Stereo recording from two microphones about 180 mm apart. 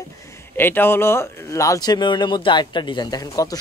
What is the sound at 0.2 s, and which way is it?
Speech, 15° left (ahead or behind).